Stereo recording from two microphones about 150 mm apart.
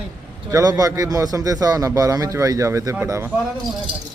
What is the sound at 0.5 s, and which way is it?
A man's voice, 25° right (ahead or behind).